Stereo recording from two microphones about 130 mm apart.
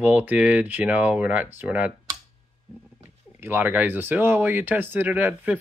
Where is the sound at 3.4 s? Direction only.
15° right (ahead or behind).